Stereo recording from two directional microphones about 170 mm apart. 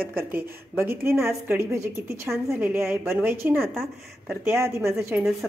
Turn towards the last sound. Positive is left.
turn(degrees=0)  # may be behind; listen again after turning